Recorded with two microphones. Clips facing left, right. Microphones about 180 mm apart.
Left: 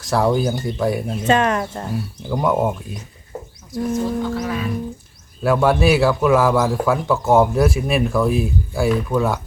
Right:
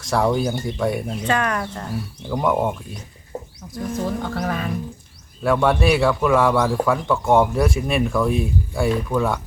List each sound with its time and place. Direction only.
0.0 s a man's voice: centre (ahead or behind)
1.3 s speech: 25° left (ahead or behind)
2.3 s a man's voice: 5° left (ahead or behind)
3.3 s bird: 30° right (ahead or behind)
4.2 s speech: 55° right (ahead or behind)
5.4 s a man's voice: 5° left (ahead or behind)